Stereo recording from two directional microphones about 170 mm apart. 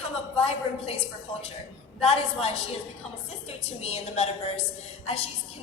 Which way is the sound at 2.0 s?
35° left (ahead or behind).